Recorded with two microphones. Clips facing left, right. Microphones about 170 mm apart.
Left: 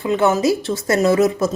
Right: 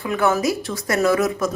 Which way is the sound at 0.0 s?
25° left (ahead or behind).